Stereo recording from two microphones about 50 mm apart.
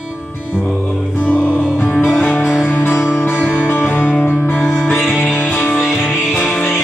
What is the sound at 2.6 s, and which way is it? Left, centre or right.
Music, left.